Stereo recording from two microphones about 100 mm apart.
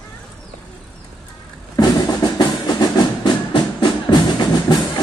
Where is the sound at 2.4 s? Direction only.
40° left (ahead or behind).